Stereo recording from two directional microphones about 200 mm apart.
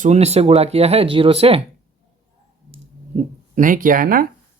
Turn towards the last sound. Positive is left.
turn(degrees=-45)  # may be behind; listen again after turning